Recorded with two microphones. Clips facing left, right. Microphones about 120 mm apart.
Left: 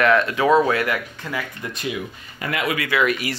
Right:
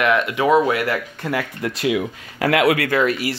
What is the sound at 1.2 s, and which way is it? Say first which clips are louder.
Speech: right 6 dB; 70° right (ahead or behind).